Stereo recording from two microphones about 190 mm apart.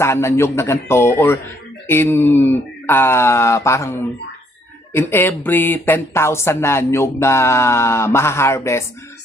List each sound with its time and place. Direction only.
0.0 s speech: 15° left (ahead or behind)